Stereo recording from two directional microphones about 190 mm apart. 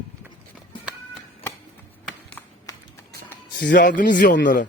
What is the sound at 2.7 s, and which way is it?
Run, 15° left (ahead or behind).